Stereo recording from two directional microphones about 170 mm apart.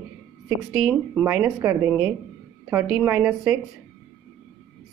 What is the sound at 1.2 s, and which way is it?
Speech, 10° right (ahead or behind).